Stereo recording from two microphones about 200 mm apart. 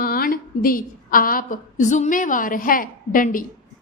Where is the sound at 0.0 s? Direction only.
45° left (ahead or behind).